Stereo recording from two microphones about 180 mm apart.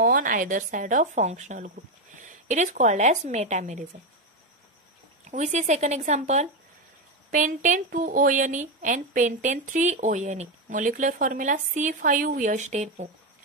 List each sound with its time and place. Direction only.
0.0 s speech: 50° right (ahead or behind)
5.2 s speech: 40° right (ahead or behind)